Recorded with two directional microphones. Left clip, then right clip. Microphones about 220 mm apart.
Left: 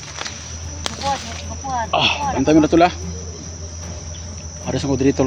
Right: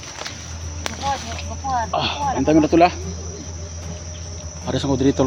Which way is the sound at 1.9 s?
30° left (ahead or behind).